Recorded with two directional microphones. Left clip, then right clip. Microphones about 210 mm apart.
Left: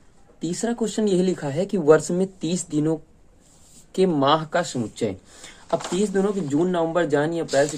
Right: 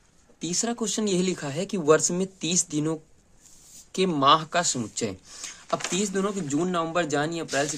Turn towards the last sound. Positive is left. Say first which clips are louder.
# left 5 dB
turn(degrees=-15)  # may be behind; listen again after turning